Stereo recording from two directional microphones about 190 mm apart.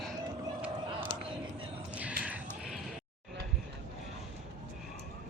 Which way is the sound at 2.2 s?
5° right (ahead or behind).